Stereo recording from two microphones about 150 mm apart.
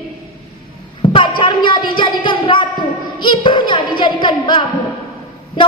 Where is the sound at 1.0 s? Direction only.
35° left (ahead or behind).